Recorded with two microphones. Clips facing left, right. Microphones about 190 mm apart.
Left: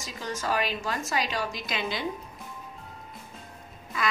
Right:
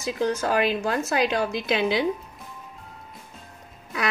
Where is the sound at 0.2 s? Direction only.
65° right (ahead or behind).